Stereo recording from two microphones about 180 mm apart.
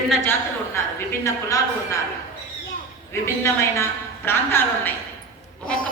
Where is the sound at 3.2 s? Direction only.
15° left (ahead or behind).